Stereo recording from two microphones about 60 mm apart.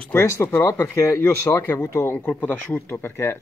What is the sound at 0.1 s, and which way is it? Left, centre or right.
Speech, left.